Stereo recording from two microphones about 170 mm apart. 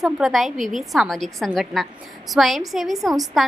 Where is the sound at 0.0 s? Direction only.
Centre (ahead or behind).